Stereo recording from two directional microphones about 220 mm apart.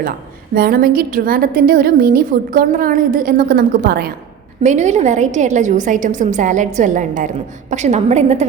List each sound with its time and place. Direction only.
0.5 s a woman's voice: 40° right (ahead or behind)
4.6 s a woman's voice: 35° right (ahead or behind)